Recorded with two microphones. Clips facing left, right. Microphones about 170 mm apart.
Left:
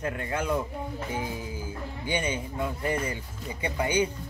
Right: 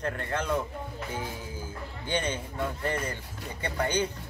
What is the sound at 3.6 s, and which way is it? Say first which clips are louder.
Speech: left 2 dB; 10° left (ahead or behind).